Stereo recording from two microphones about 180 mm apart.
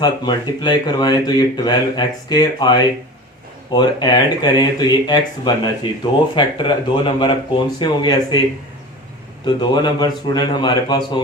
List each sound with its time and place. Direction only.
0.0 s speech: 25° left (ahead or behind)
9.5 s speech: 25° left (ahead or behind)